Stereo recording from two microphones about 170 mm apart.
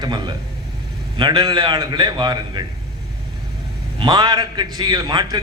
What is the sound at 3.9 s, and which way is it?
A man's voice, 25° right (ahead or behind).